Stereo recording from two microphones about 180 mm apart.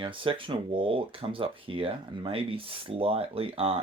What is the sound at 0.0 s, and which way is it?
Speech, 30° right (ahead or behind).